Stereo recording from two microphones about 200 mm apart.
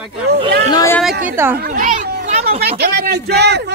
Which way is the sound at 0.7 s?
15° left (ahead or behind).